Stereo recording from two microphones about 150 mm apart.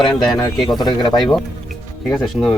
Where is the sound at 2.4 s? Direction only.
5° left (ahead or behind).